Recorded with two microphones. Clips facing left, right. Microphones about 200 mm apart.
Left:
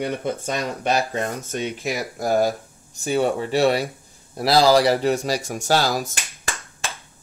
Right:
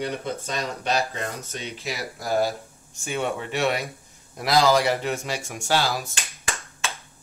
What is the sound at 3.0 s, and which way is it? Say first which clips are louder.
Speech: left 7 dB; 35° left (ahead or behind).